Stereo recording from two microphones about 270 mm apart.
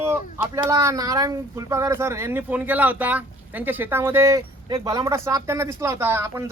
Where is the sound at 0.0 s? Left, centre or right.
Centre.